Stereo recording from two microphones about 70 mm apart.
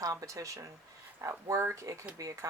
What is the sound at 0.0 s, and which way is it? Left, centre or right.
Speech, right.